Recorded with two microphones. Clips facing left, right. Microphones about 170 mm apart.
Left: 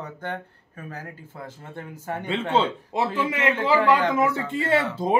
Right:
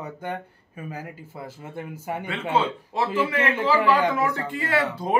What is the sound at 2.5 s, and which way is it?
Speech, 20° left (ahead or behind).